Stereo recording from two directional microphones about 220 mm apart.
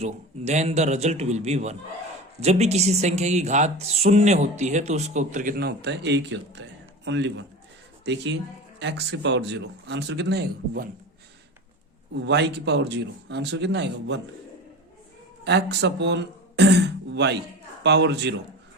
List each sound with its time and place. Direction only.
0.0 s a man's voice: 30° right (ahead or behind); by 10.8 s 50° right (ahead or behind)
12.2 s speech: 50° right (ahead or behind)
15.4 s speech: 50° right (ahead or behind)